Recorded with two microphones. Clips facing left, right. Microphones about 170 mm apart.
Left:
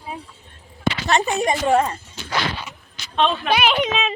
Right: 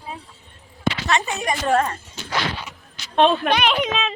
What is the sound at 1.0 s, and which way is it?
Speech, 35° left (ahead or behind).